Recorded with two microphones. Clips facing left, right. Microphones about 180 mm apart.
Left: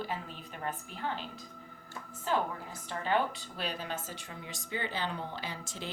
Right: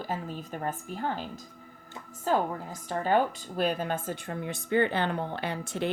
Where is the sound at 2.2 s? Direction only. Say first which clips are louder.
Right 5 dB; 40° right (ahead or behind).